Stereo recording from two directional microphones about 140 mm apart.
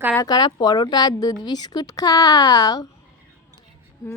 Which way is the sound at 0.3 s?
30° left (ahead or behind).